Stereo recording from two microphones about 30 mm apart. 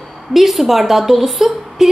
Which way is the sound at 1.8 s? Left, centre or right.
Centre.